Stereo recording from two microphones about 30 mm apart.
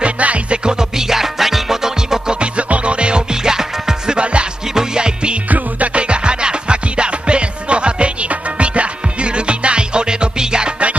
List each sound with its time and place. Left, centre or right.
0.0 s music: right
0.7 s music: centre
2.4 s music: right
4.2 s music: right